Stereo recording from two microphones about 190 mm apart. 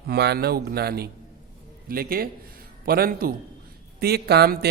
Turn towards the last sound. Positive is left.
turn(degrees=-55)  # may be behind; listen again after turning